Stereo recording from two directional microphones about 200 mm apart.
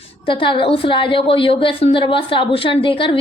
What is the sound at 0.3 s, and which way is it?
A woman's voice, 25° left (ahead or behind).